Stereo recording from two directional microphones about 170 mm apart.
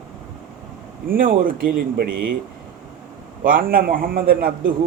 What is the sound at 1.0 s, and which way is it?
A man's voice, 55° right (ahead or behind).